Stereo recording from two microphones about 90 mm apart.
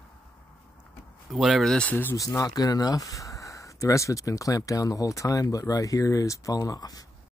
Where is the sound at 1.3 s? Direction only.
Centre (ahead or behind).